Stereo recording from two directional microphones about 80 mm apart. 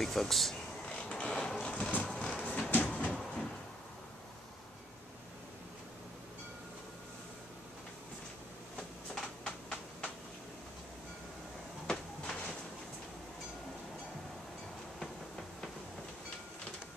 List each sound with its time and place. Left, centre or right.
0.0 s speech: centre
0.8 s printer: centre
2.0 s a sound: centre
2.7 s train: centre
9.4 s typing: centre
11.9 s a sound: centre